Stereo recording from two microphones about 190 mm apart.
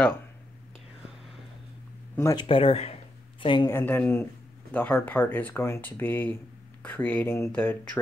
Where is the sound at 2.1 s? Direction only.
20° left (ahead or behind).